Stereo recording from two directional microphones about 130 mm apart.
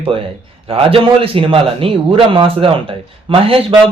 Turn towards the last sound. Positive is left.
turn(degrees=-45)  # may be behind; listen again after turning